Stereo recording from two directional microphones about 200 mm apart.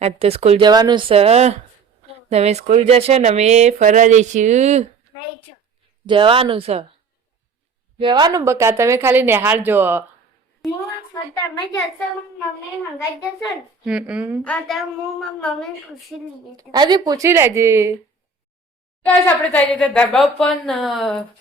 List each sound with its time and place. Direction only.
0.0 s speech: 30° right (ahead or behind)
6.1 s speech: 25° right (ahead or behind)
7.9 s speech: 25° right (ahead or behind)
10.6 s speech: centre (ahead or behind)
13.5 s speech: 5° right (ahead or behind)
14.4 s speech: 5° left (ahead or behind)
16.6 s speech: 20° right (ahead or behind)
19.0 s speech: 10° left (ahead or behind)